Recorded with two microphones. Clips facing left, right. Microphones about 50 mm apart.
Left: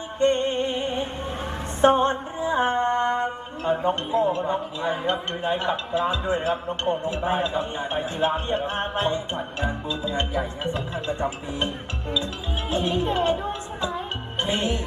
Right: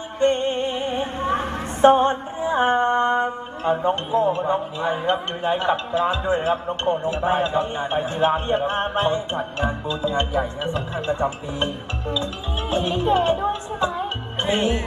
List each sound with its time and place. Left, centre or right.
0.2 s music: right
1.8 s mantra: right
5.4 s speech: right
11.0 s speech: right
12.7 s speech: right
14.4 s speech: right